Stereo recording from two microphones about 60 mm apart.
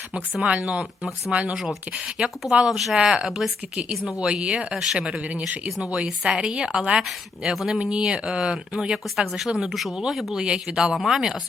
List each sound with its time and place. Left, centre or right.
0.4 s speech: right
1.5 s speech: centre
3.8 s speech: centre
4.7 s speech: centre
10.4 s speech: centre
10.9 s speech: centre